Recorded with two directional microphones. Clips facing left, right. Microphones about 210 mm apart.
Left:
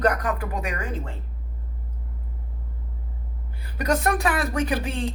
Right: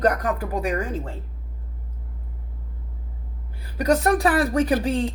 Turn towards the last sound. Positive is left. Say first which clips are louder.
# right 5 dB
turn(degrees=-35)  # may be behind; listen again after turning